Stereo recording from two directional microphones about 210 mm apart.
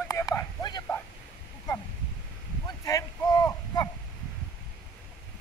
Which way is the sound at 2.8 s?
15° left (ahead or behind).